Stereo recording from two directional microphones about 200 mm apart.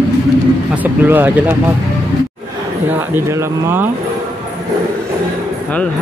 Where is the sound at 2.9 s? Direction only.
10° right (ahead or behind).